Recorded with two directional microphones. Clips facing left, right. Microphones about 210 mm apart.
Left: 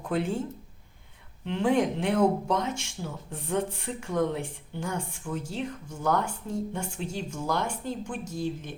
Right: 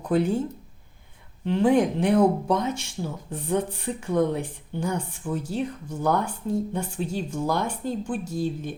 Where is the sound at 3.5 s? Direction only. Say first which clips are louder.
Right 3 dB; 35° right (ahead or behind).